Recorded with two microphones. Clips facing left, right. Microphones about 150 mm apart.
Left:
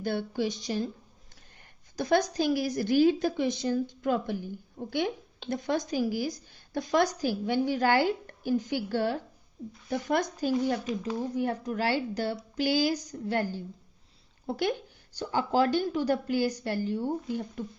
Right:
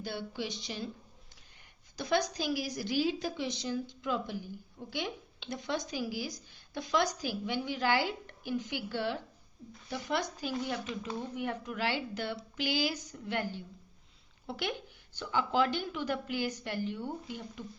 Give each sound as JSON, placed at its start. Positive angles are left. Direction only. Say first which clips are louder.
{"t": 0.0, "sound": "a woman's voice", "louder": "left 8 dB", "side_deg": 50}
{"t": 2.0, "sound": "a woman's voice", "louder": "left 6 dB", "side_deg": 45}